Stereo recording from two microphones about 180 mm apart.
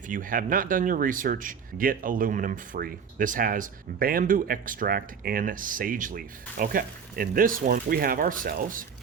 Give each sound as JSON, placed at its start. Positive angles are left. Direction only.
{"t": 0.1, "sound": "speech", "side_deg": -50}